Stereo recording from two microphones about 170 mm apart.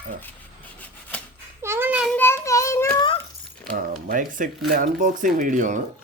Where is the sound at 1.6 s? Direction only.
15° right (ahead or behind).